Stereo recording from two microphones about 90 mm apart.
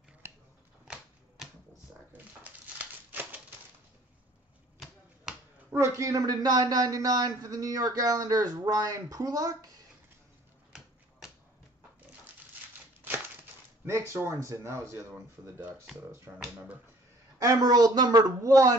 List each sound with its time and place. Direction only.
0.2 s scissors: 25° right (ahead or behind)
2.4 s a sound: 20° right (ahead or behind)
5.3 s finger snapping: 5° right (ahead or behind)
5.8 s a man's voice: 35° right (ahead or behind)
10.7 s finger snapping: 5° right (ahead or behind)
14.1 s speech: 35° right (ahead or behind)
16.3 s speech: 20° right (ahead or behind)
17.4 s a man's voice: 40° right (ahead or behind)